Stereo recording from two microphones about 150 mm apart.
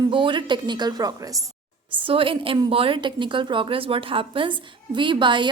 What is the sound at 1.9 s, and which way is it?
A woman's voice, 35° right (ahead or behind).